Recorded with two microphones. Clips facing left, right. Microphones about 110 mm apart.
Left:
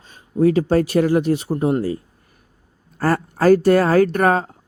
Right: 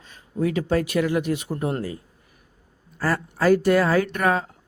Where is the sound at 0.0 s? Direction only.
35° left (ahead or behind).